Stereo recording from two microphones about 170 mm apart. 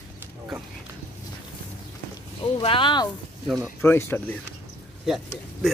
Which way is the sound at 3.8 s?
15° left (ahead or behind).